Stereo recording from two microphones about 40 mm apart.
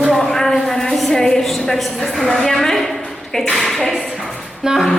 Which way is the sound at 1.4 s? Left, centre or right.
Centre.